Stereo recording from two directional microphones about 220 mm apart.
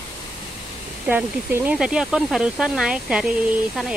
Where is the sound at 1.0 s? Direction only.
5° right (ahead or behind).